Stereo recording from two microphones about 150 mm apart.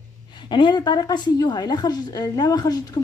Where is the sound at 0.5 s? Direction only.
30° left (ahead or behind).